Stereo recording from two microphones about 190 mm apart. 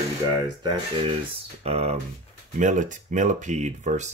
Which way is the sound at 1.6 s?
30° right (ahead or behind).